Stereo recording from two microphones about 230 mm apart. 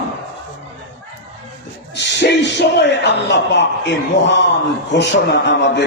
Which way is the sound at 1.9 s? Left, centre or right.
Left.